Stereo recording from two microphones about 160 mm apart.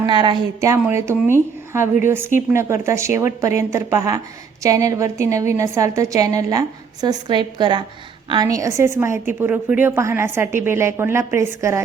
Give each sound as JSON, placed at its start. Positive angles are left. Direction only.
{"t": 0.0, "sound": "a woman's voice", "side_deg": -30}